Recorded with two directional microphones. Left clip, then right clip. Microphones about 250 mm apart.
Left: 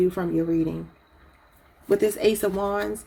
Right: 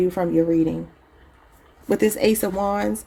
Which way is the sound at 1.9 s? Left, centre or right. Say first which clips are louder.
Right 2 dB; right.